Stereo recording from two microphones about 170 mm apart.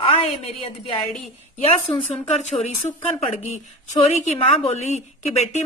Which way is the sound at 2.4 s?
40° left (ahead or behind).